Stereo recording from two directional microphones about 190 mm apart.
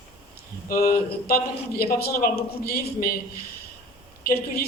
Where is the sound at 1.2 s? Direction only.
50° left (ahead or behind).